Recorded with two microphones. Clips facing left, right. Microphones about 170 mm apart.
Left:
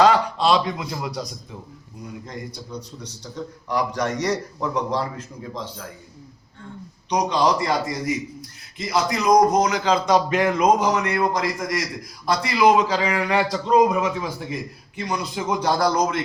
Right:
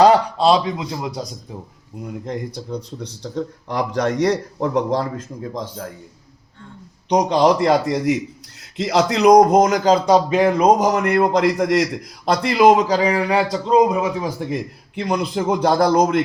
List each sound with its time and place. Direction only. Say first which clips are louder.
0.0 s a man's voice: right 4 dB; 35° right (ahead or behind)
2.0 s a man's voice: right 7 dB; 60° right (ahead or behind)
7.1 s a man's voice: right 5 dB; 55° right (ahead or behind)
14.9 s a man's voice: right 6 dB; 60° right (ahead or behind)